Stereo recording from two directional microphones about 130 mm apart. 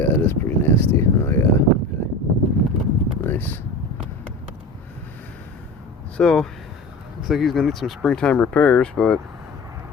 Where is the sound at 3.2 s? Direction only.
15° left (ahead or behind).